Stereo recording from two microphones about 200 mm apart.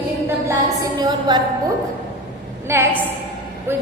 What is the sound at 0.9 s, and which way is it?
Speech, 20° right (ahead or behind).